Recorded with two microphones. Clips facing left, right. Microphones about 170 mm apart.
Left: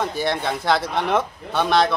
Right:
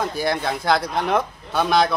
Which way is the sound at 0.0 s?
Centre (ahead or behind).